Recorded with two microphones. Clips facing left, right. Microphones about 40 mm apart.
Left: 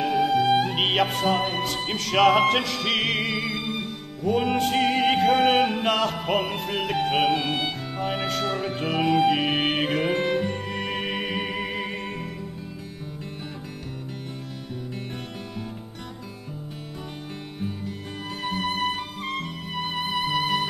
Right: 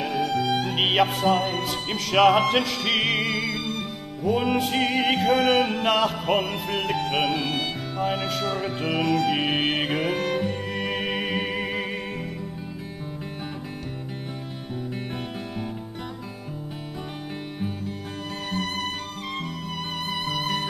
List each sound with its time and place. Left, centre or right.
0.0 s music: centre
0.7 s music: centre
19.8 s music: centre